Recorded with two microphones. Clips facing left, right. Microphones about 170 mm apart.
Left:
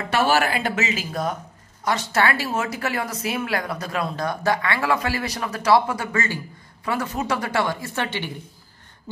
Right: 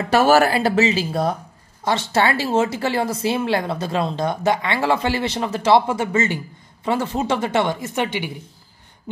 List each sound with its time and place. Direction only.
0.1 s speech: 40° right (ahead or behind); by 8.3 s 15° right (ahead or behind)